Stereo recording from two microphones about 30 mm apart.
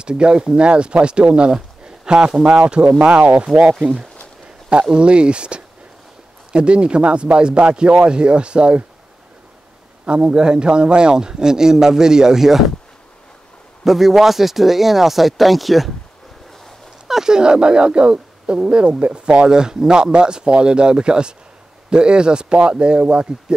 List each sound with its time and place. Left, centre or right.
0.0 s speech: right
1.9 s a sound: right
2.5 s speech: right
4.9 s speech: right
10.0 s a man's voice: right
13.8 s speech: centre
17.1 s speech: right